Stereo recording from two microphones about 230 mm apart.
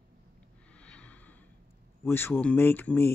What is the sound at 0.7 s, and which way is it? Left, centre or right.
Snort, centre.